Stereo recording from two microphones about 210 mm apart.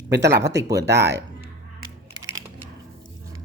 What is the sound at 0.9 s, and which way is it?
Speech, 15° right (ahead or behind).